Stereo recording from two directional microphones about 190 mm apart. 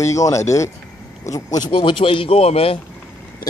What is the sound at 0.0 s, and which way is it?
Speech, 15° left (ahead or behind).